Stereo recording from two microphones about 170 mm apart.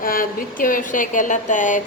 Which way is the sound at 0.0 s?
55° left (ahead or behind).